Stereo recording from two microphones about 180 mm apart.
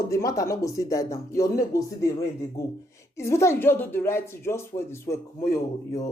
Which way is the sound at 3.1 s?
15° left (ahead or behind).